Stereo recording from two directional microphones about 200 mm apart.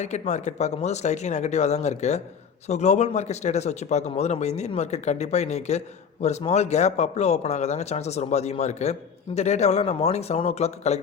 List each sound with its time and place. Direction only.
0.0 s a man's voice: 35° left (ahead or behind)